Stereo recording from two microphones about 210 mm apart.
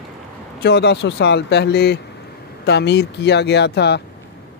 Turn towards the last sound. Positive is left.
turn(degrees=55)  # may be behind; listen again after turning